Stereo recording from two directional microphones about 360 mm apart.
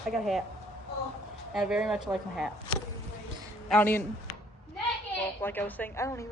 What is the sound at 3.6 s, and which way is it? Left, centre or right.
Speech, centre.